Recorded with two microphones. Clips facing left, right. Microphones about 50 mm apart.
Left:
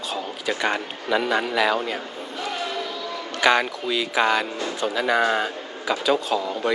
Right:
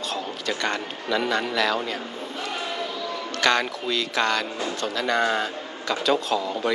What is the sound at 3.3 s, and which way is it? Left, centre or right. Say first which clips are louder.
A man's voice: left 3 dB; centre.